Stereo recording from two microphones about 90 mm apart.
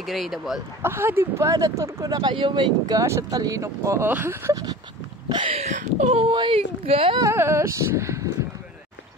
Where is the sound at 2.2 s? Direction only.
60° right (ahead or behind).